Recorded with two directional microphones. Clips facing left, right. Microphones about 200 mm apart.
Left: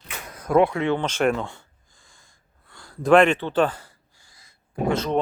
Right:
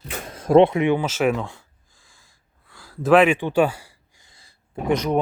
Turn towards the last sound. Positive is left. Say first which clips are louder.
# right 3 dB
turn(degrees=-15)  # may be behind; listen again after turning